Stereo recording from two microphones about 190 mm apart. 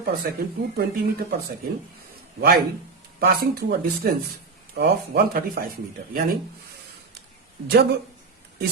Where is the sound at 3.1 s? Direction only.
55° right (ahead or behind).